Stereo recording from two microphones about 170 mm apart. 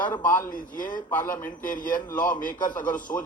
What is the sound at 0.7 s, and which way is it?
Speech, 55° left (ahead or behind).